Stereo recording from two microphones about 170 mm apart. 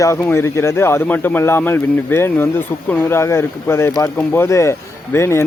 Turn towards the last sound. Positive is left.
turn(degrees=15)  # may be behind; listen again after turning